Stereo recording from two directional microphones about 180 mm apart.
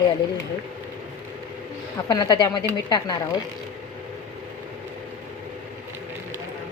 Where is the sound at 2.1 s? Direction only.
20° left (ahead or behind).